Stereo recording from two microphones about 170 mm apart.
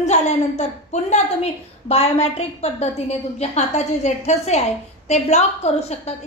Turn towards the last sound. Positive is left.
turn(degrees=40)  # may be behind; listen again after turning